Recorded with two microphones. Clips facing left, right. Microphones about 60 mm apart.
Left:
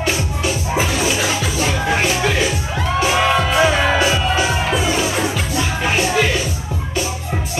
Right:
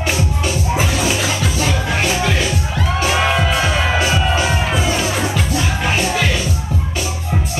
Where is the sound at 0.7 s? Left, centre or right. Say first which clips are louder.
Even; centre.